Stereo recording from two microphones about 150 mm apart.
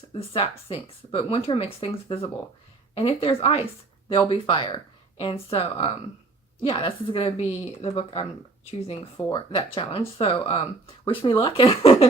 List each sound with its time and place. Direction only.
0.1 s speech: 40° left (ahead or behind)
9.3 s speech: 30° left (ahead or behind)